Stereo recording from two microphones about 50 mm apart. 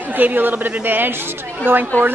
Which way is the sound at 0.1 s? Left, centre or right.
Right.